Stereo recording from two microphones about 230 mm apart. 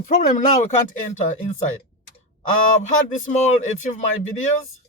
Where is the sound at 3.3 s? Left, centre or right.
Left.